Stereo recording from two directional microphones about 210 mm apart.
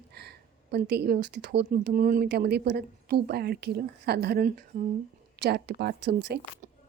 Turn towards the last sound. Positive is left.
turn(degrees=-55)  # may be behind; listen again after turning